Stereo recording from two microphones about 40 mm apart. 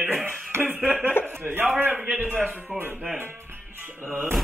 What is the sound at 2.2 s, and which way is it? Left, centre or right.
Speech, right.